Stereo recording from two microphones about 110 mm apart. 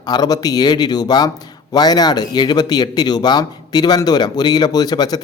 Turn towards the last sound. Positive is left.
turn(degrees=35)  # may be behind; listen again after turning